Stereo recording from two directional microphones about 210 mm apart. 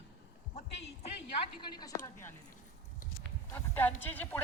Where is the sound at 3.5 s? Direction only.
10° left (ahead or behind).